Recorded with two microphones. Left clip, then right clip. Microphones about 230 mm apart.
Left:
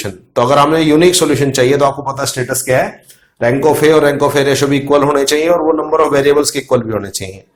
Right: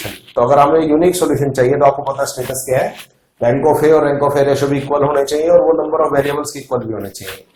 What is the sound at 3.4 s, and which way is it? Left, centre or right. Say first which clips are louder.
A man's voice: left 2 dB; left.